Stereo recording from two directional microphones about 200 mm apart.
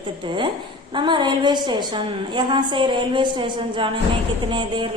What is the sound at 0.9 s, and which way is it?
A woman's voice, 25° right (ahead or behind).